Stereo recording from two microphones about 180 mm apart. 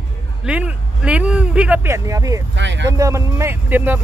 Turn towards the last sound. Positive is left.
turn(degrees=-10)  # may be behind; listen again after turning